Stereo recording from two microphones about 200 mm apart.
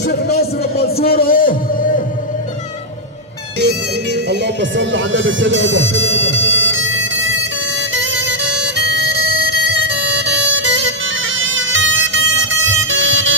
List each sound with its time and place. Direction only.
0.0 s music: 55° left (ahead or behind)
3.5 s music: 55° right (ahead or behind); by 13.3 s 70° right (ahead or behind)